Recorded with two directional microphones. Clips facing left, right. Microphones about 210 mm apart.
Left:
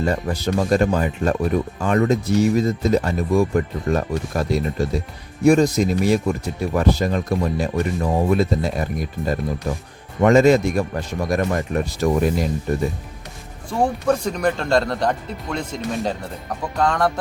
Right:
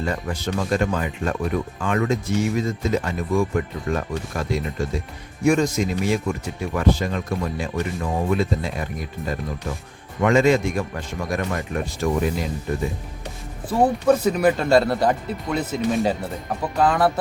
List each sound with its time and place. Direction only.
0.0 s speech: 35° left (ahead or behind)
13.7 s speech: 5° right (ahead or behind)